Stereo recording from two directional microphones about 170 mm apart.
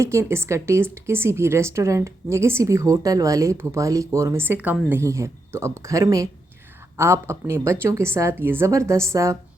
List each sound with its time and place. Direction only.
0.0 s speech: 15° right (ahead or behind)